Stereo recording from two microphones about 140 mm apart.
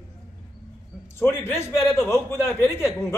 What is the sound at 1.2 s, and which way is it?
A man's voice, 20° left (ahead or behind).